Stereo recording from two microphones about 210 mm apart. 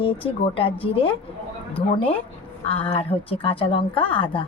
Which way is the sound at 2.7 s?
25° left (ahead or behind).